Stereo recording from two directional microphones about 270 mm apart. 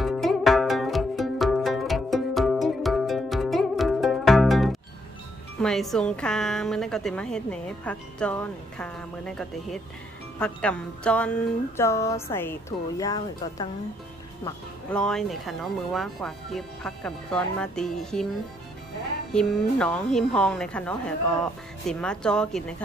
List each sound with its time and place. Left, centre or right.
0.0 s music: centre
5.6 s a woman's voice: centre
10.4 s music: centre
14.4 s a woman's voice: centre
19.3 s a woman's voice: centre